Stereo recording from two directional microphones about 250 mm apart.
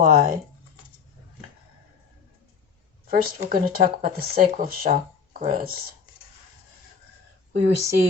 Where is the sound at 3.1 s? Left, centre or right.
Right.